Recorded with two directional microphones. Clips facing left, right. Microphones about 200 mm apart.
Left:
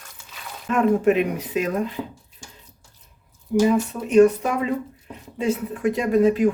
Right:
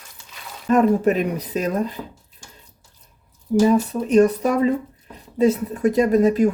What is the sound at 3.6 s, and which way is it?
Speech, 35° right (ahead or behind).